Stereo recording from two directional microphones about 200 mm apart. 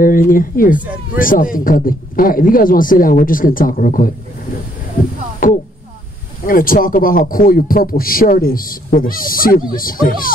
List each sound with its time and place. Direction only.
0.0 s speech: 45° left (ahead or behind)
5.4 s a sound: 45° left (ahead or behind)
6.4 s speech: 45° left (ahead or behind)